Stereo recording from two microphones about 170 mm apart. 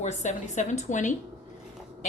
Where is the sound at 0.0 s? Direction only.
45° left (ahead or behind).